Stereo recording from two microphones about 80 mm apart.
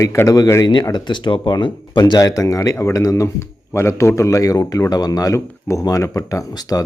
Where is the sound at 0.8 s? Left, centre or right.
Left.